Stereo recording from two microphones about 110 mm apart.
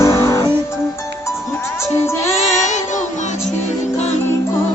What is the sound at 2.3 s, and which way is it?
Music, 90° left.